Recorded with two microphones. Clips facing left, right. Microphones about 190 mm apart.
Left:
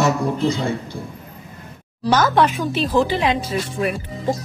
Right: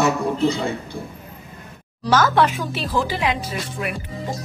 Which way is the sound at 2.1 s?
20° left (ahead or behind).